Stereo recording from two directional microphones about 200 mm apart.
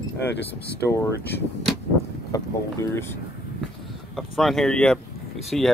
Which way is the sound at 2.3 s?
15° left (ahead or behind).